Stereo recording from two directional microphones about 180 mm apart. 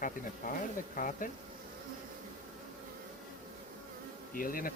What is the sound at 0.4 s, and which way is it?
Speech, 50° left (ahead or behind).